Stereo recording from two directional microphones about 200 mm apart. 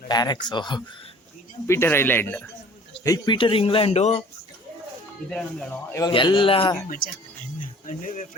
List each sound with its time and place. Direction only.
0.1 s a man's voice: 20° left (ahead or behind)
5.3 s speech: 5° left (ahead or behind)
6.0 s a man's voice: 25° left (ahead or behind)
6.8 s speech: 45° left (ahead or behind)
7.6 s music: 40° left (ahead or behind)